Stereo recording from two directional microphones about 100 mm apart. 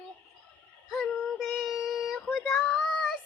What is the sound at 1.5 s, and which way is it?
Child singing, 5° right (ahead or behind).